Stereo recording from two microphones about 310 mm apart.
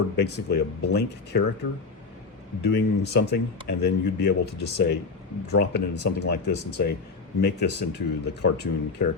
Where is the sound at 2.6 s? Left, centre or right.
Left.